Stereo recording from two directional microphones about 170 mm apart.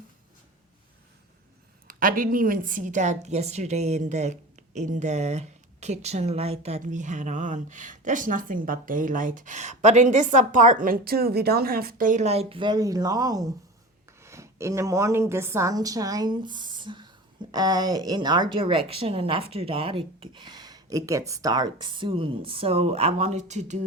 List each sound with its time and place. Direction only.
1.9 s a woman's voice: 55° right (ahead or behind)